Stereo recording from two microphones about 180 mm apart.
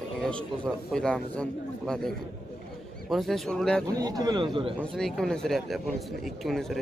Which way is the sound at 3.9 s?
20° right (ahead or behind).